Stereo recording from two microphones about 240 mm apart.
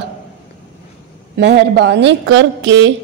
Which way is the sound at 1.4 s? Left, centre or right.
Right.